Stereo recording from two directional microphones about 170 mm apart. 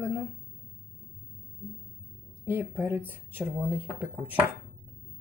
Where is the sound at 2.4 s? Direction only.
10° right (ahead or behind).